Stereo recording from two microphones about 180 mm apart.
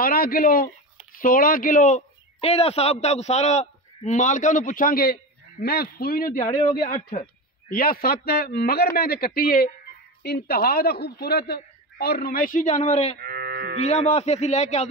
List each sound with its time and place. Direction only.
0.0 s speech: 55° left (ahead or behind)
7.7 s a man's voice: 55° left (ahead or behind); by 13.2 s 40° left (ahead or behind)
13.2 s livestock: 60° right (ahead or behind)
13.7 s a man's voice: 35° left (ahead or behind)